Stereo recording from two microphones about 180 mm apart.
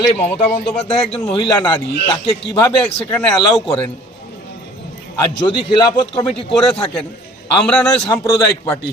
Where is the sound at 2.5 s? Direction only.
10° left (ahead or behind).